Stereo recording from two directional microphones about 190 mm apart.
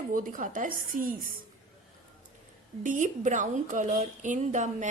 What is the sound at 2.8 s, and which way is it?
A woman's voice, 40° right (ahead or behind).